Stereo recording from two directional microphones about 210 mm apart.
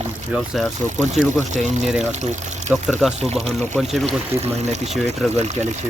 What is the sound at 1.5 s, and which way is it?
Speech, 35° right (ahead or behind).